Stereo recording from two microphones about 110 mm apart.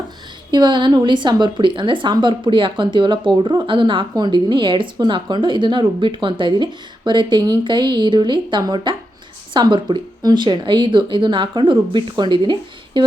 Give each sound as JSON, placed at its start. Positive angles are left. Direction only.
{"t": 0.5, "sound": "a woman's voice", "side_deg": -45}